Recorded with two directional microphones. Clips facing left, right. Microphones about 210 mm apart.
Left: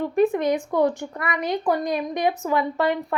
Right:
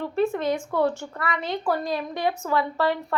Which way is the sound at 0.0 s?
15° left (ahead or behind).